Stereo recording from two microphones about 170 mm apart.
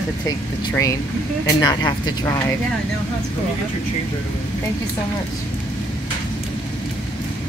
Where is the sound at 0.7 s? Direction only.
20° left (ahead or behind).